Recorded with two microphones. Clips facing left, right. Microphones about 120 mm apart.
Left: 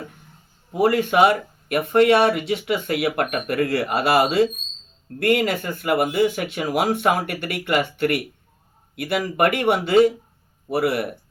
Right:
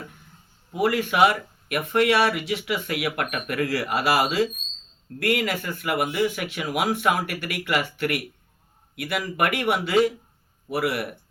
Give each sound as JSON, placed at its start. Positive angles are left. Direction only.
{"t": 0.8, "sound": "speech", "side_deg": 30}
{"t": 3.6, "sound": "speech", "side_deg": 55}
{"t": 3.8, "sound": "speech", "side_deg": 30}